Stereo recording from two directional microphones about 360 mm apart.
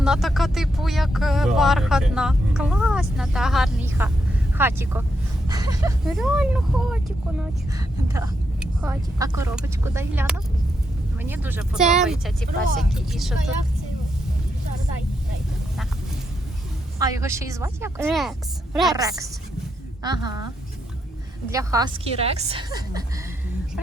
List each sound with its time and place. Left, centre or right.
0.0 s speech: centre
17.0 s speech: centre
21.5 s speech: centre